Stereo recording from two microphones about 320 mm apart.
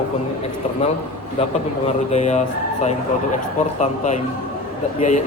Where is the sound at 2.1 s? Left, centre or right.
Left.